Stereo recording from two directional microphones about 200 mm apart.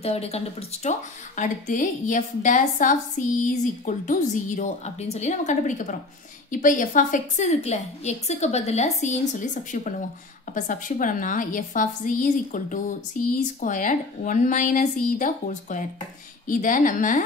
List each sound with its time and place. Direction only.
0.0 s speech: 30° left (ahead or behind)